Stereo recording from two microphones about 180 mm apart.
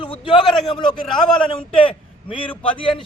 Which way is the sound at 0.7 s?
25° left (ahead or behind).